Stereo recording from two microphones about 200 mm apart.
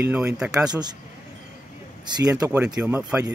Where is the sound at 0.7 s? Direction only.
20° right (ahead or behind).